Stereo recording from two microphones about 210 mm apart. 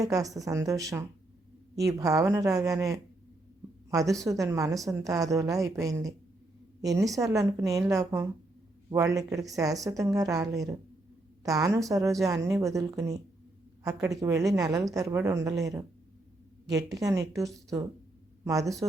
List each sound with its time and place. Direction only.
0.0 s speech: 15° right (ahead or behind)